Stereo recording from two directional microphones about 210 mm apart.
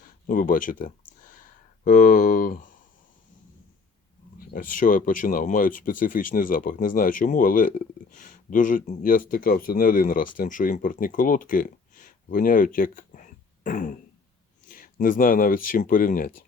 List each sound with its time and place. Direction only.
0.3 s speech: 40° left (ahead or behind)
4.4 s speech: 40° left (ahead or behind)